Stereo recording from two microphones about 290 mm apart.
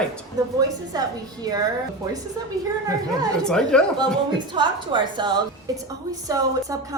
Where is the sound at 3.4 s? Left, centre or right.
Centre.